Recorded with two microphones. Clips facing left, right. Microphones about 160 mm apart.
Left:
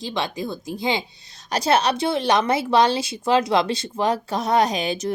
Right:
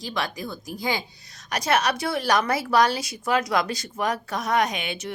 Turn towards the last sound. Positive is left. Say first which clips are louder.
# left 7 dB
turn(degrees=35)  # may be behind; listen again after turning